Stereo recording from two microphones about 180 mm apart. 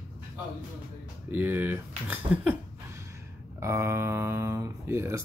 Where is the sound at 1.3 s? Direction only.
10° right (ahead or behind).